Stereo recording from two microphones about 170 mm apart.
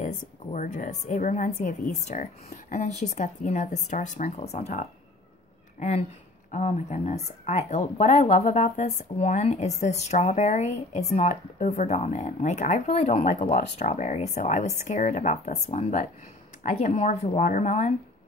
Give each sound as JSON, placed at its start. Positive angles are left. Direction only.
{"t": 0.0, "sound": "a woman's voice", "side_deg": 50}